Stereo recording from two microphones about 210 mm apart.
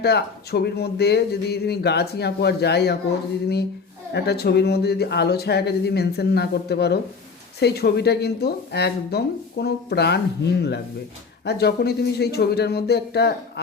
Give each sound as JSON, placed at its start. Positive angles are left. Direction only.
{"t": 0.0, "sound": "speech", "side_deg": 50}
{"t": 4.1, "sound": "speech", "side_deg": 50}